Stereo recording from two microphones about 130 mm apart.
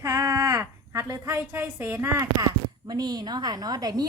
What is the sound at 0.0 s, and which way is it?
A woman's voice, 25° right (ahead or behind).